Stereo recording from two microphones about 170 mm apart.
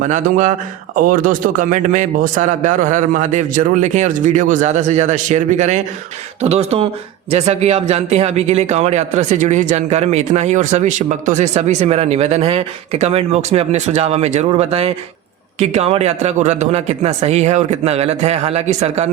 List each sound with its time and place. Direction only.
0.0 s a man's voice: 50° right (ahead or behind)